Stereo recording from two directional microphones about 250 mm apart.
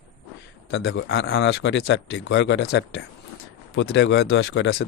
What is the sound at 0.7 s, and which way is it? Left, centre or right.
Speech, left.